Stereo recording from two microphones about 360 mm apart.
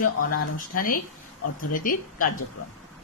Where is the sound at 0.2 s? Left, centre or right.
Left.